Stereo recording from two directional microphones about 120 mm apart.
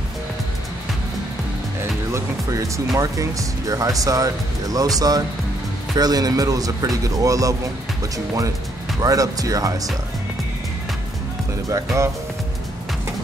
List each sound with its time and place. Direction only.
1.8 s speech: 25° right (ahead or behind)
9.0 s speech: 30° right (ahead or behind)
11.7 s speech: 25° right (ahead or behind)